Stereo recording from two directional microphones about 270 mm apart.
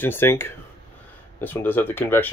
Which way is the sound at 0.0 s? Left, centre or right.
Centre.